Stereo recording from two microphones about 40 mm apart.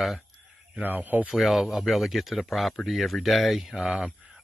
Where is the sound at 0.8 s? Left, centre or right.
Right.